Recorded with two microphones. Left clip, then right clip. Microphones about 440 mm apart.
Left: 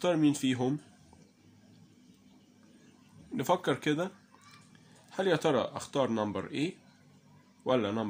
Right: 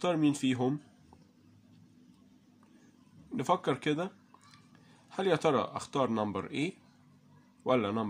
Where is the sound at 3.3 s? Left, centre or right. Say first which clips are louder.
Left 1 dB; right.